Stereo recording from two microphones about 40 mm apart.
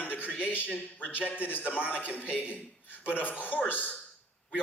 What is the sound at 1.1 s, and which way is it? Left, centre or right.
Speech, left.